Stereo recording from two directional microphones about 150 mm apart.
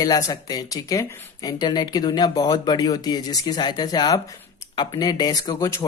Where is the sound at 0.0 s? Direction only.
25° left (ahead or behind).